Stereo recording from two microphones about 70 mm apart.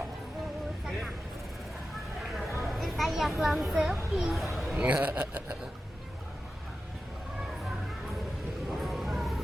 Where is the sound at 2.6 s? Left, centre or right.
Centre.